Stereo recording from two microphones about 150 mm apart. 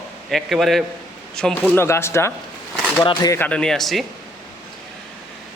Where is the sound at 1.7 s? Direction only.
15° left (ahead or behind).